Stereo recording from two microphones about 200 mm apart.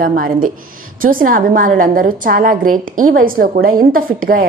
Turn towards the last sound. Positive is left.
turn(degrees=-45)  # may be behind; listen again after turning